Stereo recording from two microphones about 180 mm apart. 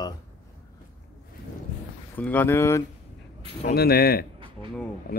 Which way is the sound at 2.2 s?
10° left (ahead or behind).